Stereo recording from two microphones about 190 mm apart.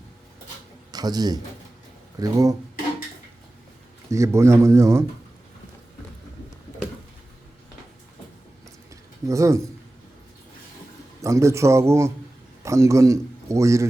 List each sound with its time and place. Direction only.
0.9 s a man's voice: 20° right (ahead or behind)
4.1 s speech: 15° right (ahead or behind)
9.2 s speech: 15° right (ahead or behind)
11.2 s a man's voice: 15° right (ahead or behind)